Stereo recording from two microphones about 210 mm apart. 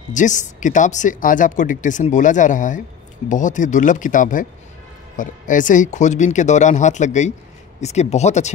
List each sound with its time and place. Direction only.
0.1 s speech: 35° left (ahead or behind)